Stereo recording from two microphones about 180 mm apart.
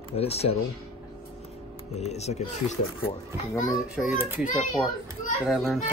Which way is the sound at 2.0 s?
35° left (ahead or behind).